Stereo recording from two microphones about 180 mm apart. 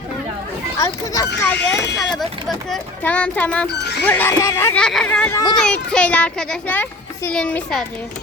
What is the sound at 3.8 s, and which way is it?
Speech, 70° left (ahead or behind).